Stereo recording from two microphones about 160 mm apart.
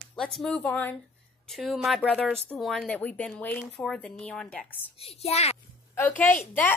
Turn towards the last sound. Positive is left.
turn(degrees=10)  # may be behind; listen again after turning